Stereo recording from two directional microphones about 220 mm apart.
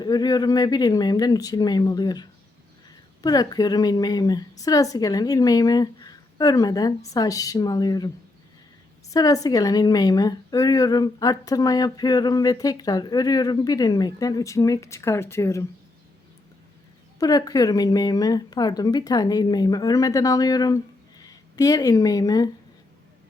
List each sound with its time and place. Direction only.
0.0 s a woman's voice: 20° left (ahead or behind)
9.1 s a woman's voice: 15° left (ahead or behind)
17.2 s a woman's voice: 15° left (ahead or behind)